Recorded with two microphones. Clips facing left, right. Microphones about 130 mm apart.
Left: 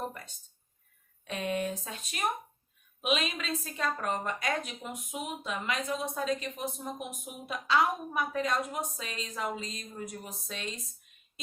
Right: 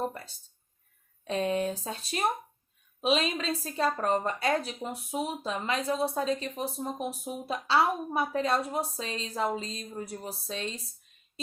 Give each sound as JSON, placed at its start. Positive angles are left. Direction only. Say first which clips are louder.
{"t": 1.2, "sound": "a woman's voice", "louder": "right 4 dB", "side_deg": -35}